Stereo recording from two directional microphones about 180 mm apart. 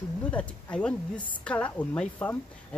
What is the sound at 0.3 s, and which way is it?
Speech, 5° left (ahead or behind).